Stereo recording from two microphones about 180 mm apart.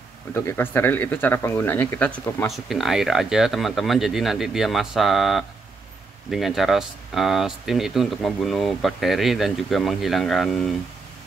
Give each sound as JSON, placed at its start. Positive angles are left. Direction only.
{"t": 0.3, "sound": "speech", "side_deg": 10}